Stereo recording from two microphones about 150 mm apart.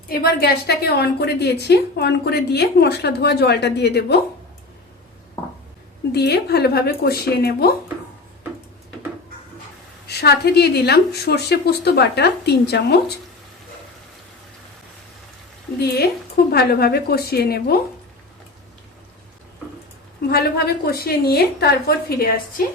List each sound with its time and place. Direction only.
0.1 s a woman's voice: 85° left
6.1 s a woman's voice: 90° left
10.1 s a woman's voice: 90° left
15.8 s a woman's voice: 90° left
20.3 s a woman's voice: 90° left